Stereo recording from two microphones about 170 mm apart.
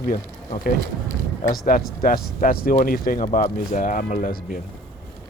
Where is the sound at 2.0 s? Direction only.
55° left (ahead or behind).